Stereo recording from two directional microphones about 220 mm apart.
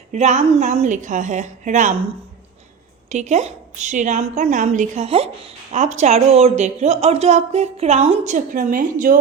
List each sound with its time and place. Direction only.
0.1 s speech: 30° right (ahead or behind)
3.1 s speech: 30° right (ahead or behind)